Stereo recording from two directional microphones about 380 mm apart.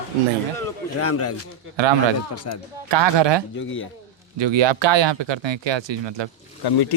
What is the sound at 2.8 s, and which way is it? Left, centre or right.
Speech, right.